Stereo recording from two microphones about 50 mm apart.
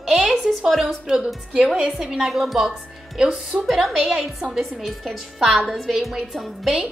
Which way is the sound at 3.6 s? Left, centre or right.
Centre.